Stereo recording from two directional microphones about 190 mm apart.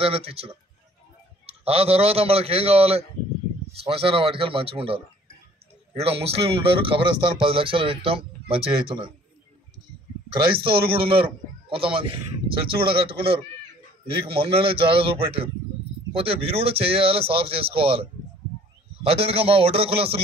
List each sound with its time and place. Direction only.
0.0 s a man's voice: 30° right (ahead or behind)
10.3 s a man's voice: 25° right (ahead or behind)
19.0 s a man's voice: 30° right (ahead or behind)